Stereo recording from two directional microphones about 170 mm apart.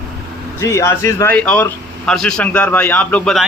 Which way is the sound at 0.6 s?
15° left (ahead or behind).